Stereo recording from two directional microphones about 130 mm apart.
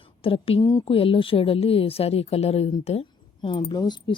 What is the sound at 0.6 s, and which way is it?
Speech, 30° left (ahead or behind).